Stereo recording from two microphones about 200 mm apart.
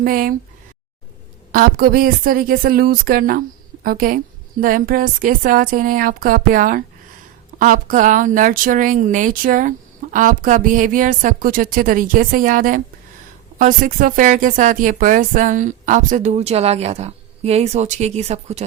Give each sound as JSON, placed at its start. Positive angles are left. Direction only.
{"t": 0.0, "sound": "speech", "side_deg": -45}
{"t": 1.5, "sound": "speech", "side_deg": -45}